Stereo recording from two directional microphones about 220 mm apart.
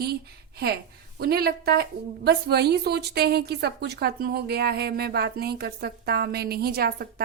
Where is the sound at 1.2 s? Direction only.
45° right (ahead or behind).